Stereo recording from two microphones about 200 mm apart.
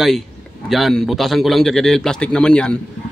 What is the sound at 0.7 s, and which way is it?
A man's voice, centre (ahead or behind).